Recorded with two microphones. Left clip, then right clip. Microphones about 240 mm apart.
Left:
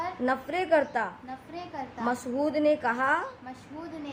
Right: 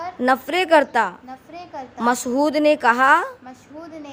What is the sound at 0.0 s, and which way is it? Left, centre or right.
A child's voice, right.